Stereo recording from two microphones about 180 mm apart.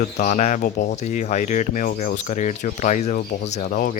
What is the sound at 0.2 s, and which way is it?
Speech, 40° left (ahead or behind).